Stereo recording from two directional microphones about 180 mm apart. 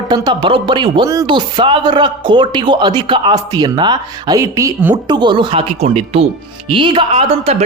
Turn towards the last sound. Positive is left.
turn(degrees=-35)  # may be behind; listen again after turning